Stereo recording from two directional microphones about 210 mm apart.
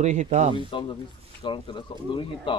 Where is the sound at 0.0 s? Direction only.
35° right (ahead or behind).